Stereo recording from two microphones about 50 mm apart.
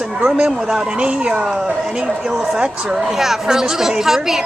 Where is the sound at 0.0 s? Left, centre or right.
Centre.